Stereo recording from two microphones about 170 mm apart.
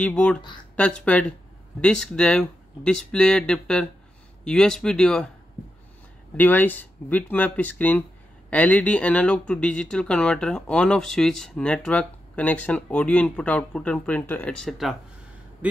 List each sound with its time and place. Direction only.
0.0 s speech: 5° left (ahead or behind)
6.3 s speech: 10° left (ahead or behind)
15.6 s a sound: 10° right (ahead or behind)